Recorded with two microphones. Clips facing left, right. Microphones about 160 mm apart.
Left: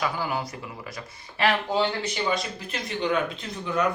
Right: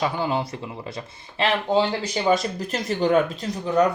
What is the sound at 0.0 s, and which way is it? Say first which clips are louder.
Speech: right 4 dB; 25° right (ahead or behind).